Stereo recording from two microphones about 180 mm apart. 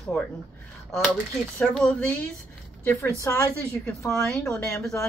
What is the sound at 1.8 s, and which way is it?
A woman's voice, 5° left (ahead or behind).